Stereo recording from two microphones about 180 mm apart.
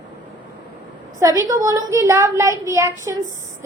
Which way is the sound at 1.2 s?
20° right (ahead or behind).